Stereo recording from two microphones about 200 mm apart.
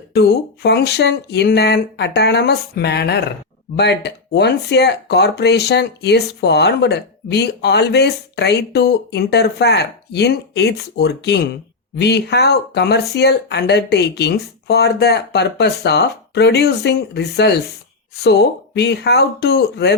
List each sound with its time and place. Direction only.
0.1 s speech: 55° left (ahead or behind)